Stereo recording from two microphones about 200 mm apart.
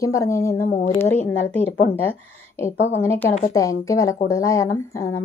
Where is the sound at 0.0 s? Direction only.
15° left (ahead or behind).